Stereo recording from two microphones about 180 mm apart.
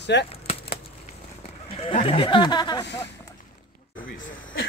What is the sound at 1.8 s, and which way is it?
Speech, 35° left (ahead or behind).